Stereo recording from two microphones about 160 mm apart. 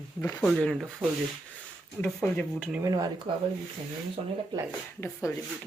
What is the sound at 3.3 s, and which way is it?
Speech, 35° right (ahead or behind).